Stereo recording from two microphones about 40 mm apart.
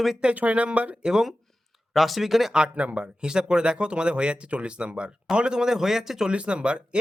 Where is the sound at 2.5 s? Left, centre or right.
Right; by 6.3 s centre.